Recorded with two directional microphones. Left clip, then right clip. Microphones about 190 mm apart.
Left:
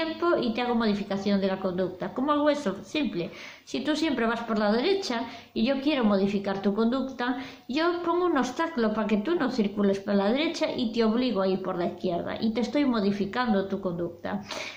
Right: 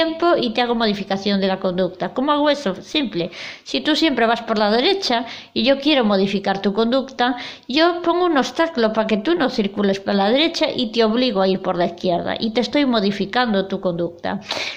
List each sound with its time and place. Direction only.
0.0 s a woman's voice: 35° right (ahead or behind)